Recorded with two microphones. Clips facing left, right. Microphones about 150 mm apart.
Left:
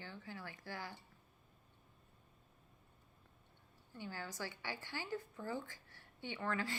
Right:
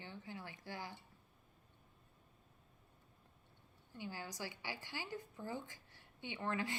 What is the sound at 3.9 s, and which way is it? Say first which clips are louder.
A woman's voice: even; 15° right (ahead or behind).